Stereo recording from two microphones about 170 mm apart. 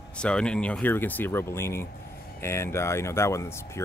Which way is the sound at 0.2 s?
5° left (ahead or behind).